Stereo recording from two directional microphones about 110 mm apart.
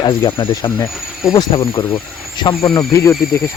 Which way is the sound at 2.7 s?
30° left (ahead or behind).